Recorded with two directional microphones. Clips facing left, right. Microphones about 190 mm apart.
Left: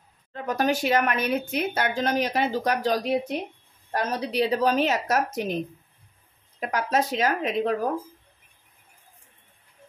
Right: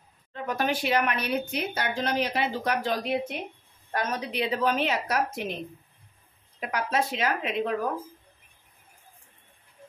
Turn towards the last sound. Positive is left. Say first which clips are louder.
# left 3 dB
turn(degrees=40)  # may be behind; listen again after turning